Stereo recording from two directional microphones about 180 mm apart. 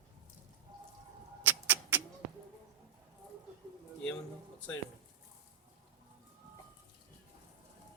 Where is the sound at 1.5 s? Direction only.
10° right (ahead or behind).